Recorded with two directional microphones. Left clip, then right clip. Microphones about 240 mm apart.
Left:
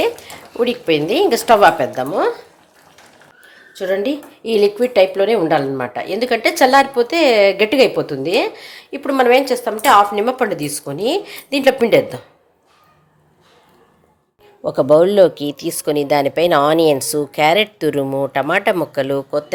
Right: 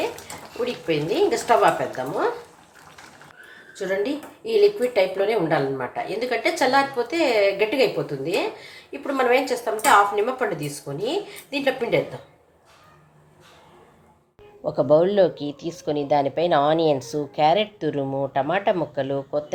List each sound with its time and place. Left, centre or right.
0.6 s speech: left
3.8 s speech: left
14.6 s speech: left